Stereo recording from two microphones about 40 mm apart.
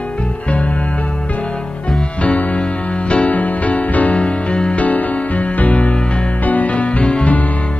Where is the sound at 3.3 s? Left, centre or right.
Left.